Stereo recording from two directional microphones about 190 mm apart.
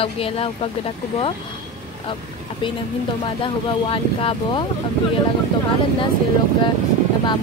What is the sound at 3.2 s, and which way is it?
Speech, 25° left (ahead or behind).